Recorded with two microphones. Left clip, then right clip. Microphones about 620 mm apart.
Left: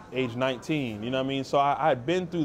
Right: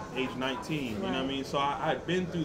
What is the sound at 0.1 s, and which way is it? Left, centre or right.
Speech, left.